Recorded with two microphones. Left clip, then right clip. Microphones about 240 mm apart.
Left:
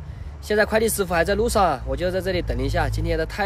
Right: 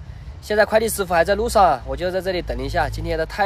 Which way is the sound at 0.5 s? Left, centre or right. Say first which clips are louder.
Right 3 dB; centre.